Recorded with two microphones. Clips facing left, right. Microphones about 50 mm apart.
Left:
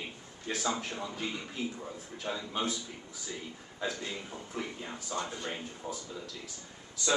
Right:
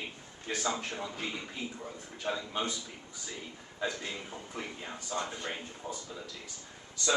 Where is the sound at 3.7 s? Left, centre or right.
Centre.